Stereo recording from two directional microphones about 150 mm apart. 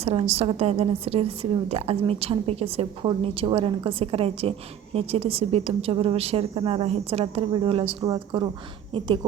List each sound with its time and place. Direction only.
0.0 s a woman's voice: 40° right (ahead or behind)